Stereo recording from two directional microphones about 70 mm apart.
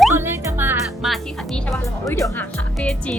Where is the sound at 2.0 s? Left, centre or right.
Left.